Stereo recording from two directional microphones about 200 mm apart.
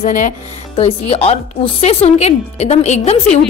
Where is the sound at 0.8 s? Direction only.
30° left (ahead or behind).